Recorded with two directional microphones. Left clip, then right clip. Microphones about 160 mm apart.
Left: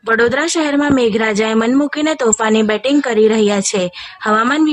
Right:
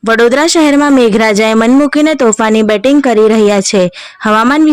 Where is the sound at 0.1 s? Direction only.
30° right (ahead or behind).